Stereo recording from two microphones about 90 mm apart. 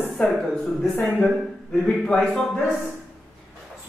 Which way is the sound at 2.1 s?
5° left (ahead or behind).